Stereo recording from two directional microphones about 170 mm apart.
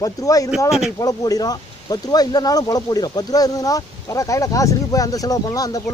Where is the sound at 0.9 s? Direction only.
20° left (ahead or behind).